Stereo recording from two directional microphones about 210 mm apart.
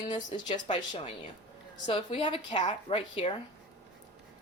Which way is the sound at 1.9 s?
25° left (ahead or behind).